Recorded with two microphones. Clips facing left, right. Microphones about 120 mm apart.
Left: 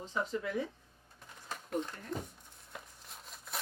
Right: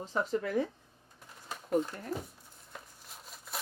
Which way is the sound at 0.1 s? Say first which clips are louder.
Right 4 dB; 45° right (ahead or behind).